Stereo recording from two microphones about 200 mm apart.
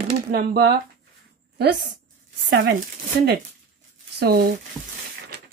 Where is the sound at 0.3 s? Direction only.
50° right (ahead or behind).